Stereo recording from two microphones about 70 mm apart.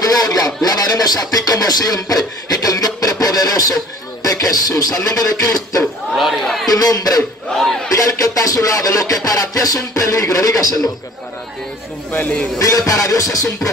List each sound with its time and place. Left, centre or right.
0.0 s speech: left
4.2 s music: left
6.1 s speech: centre
6.7 s music: left
7.5 s battle cry: centre
7.9 s music: left
12.1 s speech: left
12.5 s music: left